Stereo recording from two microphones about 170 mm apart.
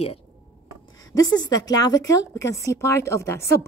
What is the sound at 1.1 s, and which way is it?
A woman's voice, 25° left (ahead or behind).